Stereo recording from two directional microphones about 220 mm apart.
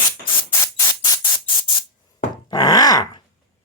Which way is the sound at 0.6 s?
15° left (ahead or behind).